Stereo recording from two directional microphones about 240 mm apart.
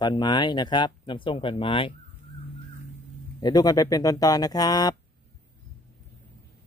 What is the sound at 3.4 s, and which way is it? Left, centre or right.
Speech, centre.